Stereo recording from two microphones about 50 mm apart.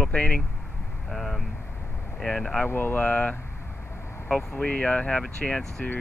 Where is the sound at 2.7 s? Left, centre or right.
Left.